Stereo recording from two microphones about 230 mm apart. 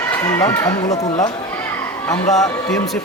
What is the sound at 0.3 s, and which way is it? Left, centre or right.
Speech, centre.